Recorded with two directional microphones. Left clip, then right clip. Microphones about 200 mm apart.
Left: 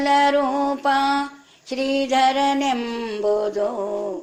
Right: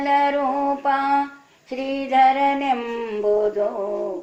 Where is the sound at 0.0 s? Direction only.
40° left (ahead or behind).